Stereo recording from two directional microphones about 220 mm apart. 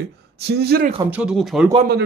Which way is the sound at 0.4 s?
45° right (ahead or behind).